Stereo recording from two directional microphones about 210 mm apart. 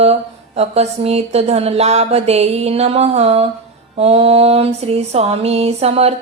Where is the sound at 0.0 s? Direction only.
30° right (ahead or behind).